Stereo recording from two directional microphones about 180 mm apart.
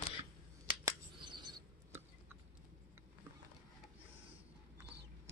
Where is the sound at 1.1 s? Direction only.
25° right (ahead or behind).